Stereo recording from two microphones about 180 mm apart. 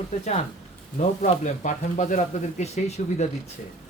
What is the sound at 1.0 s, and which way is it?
Speech, 40° left (ahead or behind).